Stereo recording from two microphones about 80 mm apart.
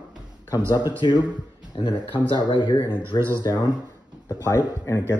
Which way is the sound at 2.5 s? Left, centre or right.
Left.